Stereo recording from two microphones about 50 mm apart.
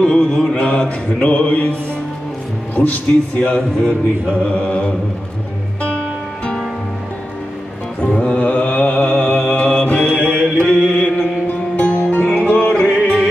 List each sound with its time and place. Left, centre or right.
0.0 s mantra: centre
2.7 s speech: left
3.3 s mantra: left
8.0 s music: left
8.4 s mantra: left
11.4 s music: left